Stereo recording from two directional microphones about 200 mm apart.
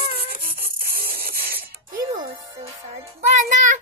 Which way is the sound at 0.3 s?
45° right (ahead or behind).